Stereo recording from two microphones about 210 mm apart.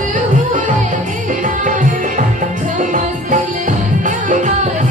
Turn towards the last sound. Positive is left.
turn(degrees=-35)  # may be behind; listen again after turning